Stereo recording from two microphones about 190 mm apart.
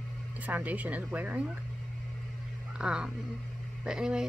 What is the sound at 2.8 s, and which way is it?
Speech, 5° right (ahead or behind).